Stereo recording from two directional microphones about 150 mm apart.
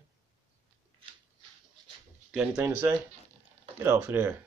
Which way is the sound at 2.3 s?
10° right (ahead or behind).